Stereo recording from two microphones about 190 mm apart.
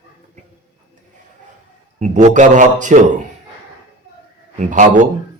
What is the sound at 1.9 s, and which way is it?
Speech, 40° right (ahead or behind).